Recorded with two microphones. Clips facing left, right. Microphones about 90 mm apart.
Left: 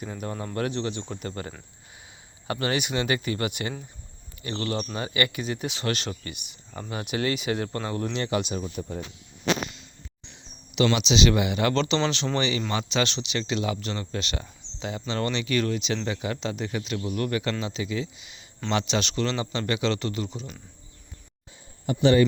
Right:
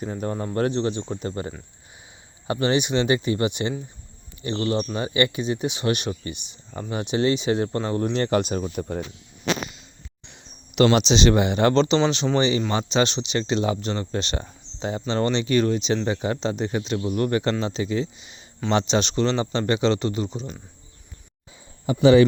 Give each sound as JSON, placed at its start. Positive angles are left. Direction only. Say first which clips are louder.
{"t": 0.0, "sound": "speech", "louder": "right 5 dB", "side_deg": -30}
{"t": 10.9, "sound": "speech", "louder": "right 4 dB", "side_deg": -35}
{"t": 11.7, "sound": "speech", "louder": "right 5 dB", "side_deg": -25}